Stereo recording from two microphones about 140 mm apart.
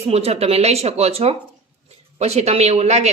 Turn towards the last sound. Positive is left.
turn(degrees=-50)  # may be behind; listen again after turning